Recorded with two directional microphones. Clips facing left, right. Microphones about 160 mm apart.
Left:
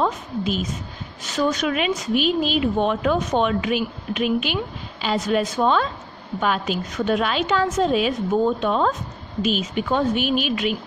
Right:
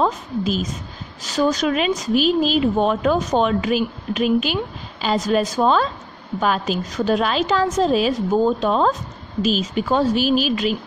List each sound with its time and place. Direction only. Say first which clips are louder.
0.0 s a woman's voice: right 2 dB; 40° right (ahead or behind)